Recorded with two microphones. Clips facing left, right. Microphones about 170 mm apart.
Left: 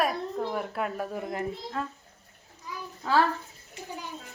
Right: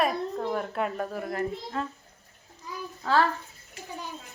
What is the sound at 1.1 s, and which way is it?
Speech, 20° left (ahead or behind).